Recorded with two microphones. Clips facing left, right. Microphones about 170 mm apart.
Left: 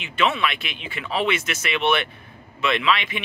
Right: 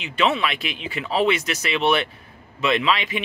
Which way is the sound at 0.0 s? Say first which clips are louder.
Right 1 dB; 35° right (ahead or behind).